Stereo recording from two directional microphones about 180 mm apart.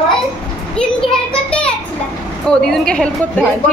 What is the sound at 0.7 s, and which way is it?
A child's voice, 5° left (ahead or behind).